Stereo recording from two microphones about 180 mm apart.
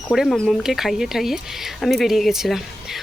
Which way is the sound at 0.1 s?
Centre (ahead or behind).